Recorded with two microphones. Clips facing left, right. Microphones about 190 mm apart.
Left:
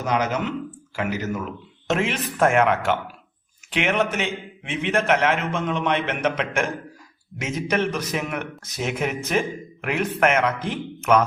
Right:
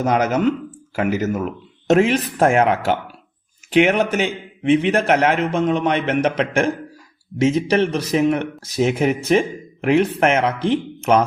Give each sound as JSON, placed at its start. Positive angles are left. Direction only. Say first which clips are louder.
{"t": 0.0, "sound": "speech", "louder": "right 6 dB", "side_deg": -45}